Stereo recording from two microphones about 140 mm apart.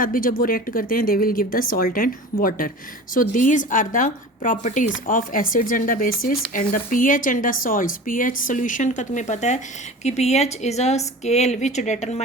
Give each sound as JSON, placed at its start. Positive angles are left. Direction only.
{"t": 0.0, "sound": "speech", "side_deg": 80}
{"t": 3.2, "sound": "speech", "side_deg": 70}
{"t": 5.0, "sound": "speech", "side_deg": 80}